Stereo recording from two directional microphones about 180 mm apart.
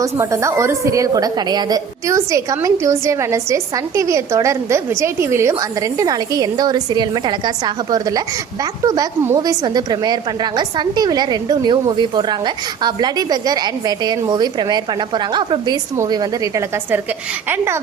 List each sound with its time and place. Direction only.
0.0 s a woman's voice: 15° right (ahead or behind)